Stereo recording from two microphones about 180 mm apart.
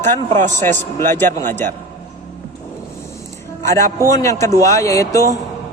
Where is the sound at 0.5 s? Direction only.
15° left (ahead or behind).